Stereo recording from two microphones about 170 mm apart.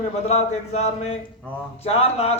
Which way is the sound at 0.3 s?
40° left (ahead or behind).